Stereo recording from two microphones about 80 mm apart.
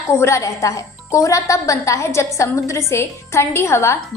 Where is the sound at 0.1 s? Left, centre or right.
Left.